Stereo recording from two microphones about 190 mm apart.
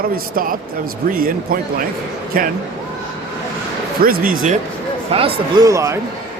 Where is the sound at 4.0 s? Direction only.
50° right (ahead or behind).